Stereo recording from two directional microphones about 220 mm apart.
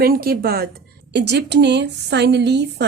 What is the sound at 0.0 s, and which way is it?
A woman's voice, 45° right (ahead or behind).